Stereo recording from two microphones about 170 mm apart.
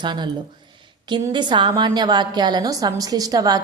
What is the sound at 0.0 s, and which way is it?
A woman's voice, 25° right (ahead or behind).